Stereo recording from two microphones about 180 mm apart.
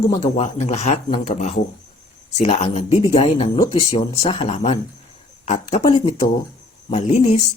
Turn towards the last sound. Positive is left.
turn(degrees=35)  # may be behind; listen again after turning